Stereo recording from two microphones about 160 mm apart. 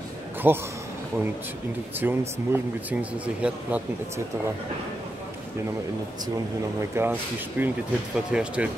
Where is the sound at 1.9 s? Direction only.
10° right (ahead or behind).